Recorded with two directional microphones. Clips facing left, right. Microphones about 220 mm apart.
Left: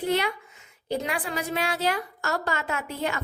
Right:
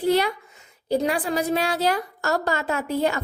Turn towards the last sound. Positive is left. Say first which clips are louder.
# right 6 dB
turn(degrees=-35)  # may be behind; listen again after turning